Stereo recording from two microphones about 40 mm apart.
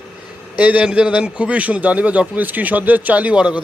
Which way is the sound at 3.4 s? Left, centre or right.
Right.